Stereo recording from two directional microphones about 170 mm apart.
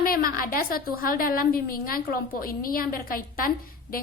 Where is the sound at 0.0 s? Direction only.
55° left (ahead or behind).